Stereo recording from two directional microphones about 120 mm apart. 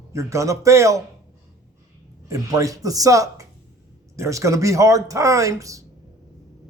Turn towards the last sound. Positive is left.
turn(degrees=-25)  # may be behind; listen again after turning